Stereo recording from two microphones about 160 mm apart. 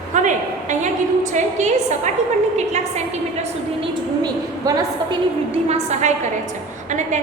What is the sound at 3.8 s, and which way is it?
Speech, 25° right (ahead or behind).